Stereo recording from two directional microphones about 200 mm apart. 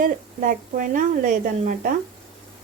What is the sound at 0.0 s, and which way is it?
A woman's voice, 45° right (ahead or behind).